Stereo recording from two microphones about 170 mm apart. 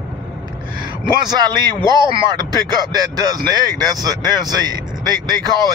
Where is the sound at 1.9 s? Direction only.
25° right (ahead or behind).